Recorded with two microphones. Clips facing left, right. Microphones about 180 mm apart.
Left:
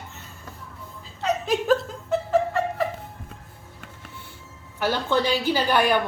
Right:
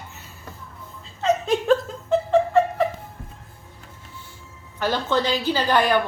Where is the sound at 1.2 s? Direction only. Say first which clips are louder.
Right 3 dB; centre (ahead or behind).